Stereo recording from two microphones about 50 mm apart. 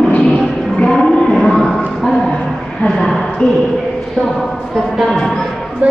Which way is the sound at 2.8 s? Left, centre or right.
Centre.